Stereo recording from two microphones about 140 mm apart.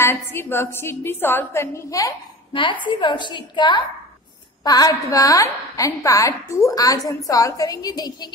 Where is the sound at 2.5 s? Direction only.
35° left (ahead or behind).